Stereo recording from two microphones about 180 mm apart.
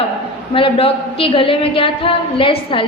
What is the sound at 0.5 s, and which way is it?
A woman's voice, 30° left (ahead or behind).